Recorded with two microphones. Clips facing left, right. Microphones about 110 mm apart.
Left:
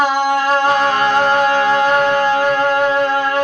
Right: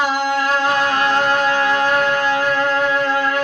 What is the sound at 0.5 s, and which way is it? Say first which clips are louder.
Music: left 3 dB; 35° left (ahead or behind).